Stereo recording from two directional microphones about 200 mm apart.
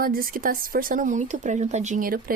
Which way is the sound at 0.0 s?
45° right (ahead or behind).